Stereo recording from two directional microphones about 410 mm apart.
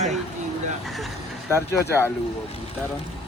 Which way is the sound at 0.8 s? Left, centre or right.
Centre.